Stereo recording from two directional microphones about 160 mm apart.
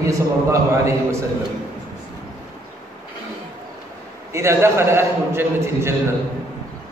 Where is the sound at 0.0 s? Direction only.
20° right (ahead or behind).